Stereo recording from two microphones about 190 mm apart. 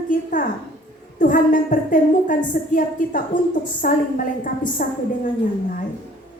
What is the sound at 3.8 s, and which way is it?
A woman's voice, 45° left (ahead or behind).